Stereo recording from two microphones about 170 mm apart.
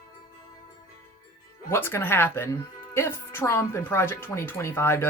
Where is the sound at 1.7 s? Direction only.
15° left (ahead or behind).